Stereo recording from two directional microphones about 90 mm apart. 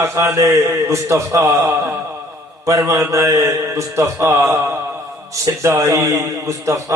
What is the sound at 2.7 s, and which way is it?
A man's voice, 35° right (ahead or behind).